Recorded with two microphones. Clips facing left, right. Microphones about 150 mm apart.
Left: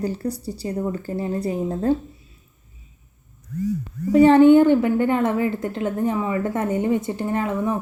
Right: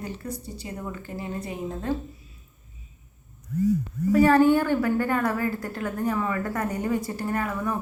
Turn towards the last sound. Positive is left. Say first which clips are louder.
# left 5 dB
turn(degrees=25)  # may be behind; listen again after turning